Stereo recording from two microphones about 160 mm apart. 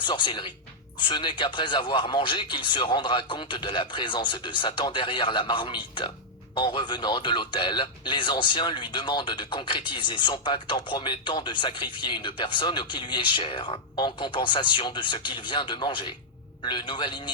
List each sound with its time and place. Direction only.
0.0 s speech: 30° left (ahead or behind)